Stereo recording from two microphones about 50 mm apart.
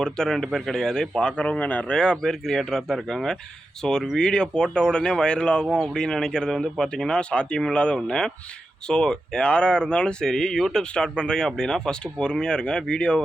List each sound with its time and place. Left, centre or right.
0.0 s speech: centre
1.4 s speech: left
2.0 s speech: centre